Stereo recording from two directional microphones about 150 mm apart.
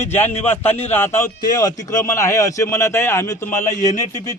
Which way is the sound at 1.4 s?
25° left (ahead or behind).